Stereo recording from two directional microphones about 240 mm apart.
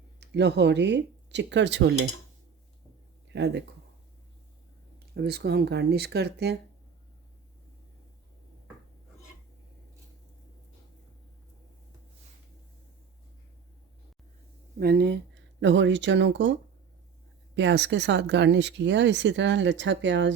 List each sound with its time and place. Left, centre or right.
0.2 s speech: right
3.3 s speech: right
5.1 s speech: right
14.8 s speech: right